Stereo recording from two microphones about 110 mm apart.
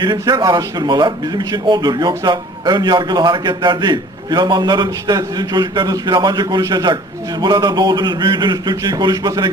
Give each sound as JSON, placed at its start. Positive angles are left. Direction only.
{"t": 0.0, "sound": "a man's voice", "side_deg": -40}